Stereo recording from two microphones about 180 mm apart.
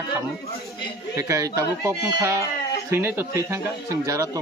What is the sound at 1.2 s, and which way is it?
Speech, 15° right (ahead or behind).